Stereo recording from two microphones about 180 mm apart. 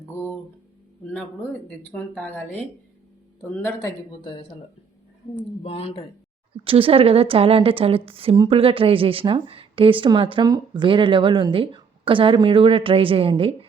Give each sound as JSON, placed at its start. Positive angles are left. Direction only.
{"t": 1.9, "sound": "speech", "side_deg": 5}
{"t": 3.8, "sound": "speech", "side_deg": 25}
{"t": 5.6, "sound": "speech", "side_deg": 35}
{"t": 6.7, "sound": "a woman's voice", "side_deg": -30}